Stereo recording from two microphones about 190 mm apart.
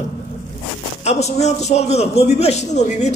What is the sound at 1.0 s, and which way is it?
A man's voice, 35° left (ahead or behind).